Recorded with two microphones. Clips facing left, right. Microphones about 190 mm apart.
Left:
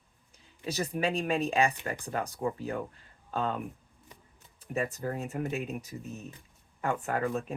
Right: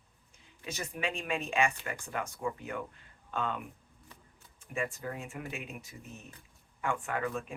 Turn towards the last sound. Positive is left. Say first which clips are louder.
# left 4 dB
turn(degrees=40)  # may be behind; listen again after turning